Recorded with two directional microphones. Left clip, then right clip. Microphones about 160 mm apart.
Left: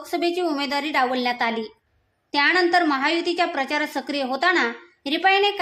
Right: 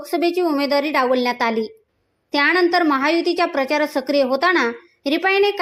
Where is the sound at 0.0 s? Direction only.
15° right (ahead or behind).